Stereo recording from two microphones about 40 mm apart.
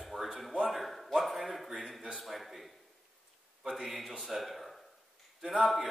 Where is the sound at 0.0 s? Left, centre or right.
Centre.